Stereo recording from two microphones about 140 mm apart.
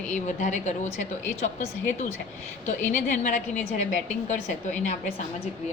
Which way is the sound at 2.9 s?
65° left (ahead or behind).